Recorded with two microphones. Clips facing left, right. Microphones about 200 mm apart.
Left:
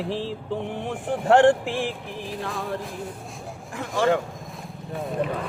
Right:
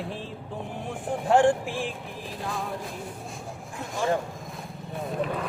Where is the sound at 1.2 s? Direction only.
70° left (ahead or behind).